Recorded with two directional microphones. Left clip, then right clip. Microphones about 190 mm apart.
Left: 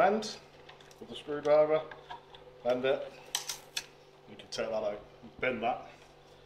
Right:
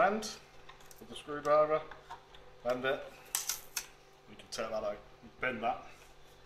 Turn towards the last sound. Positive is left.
turn(degrees=5)  # may be behind; listen again after turning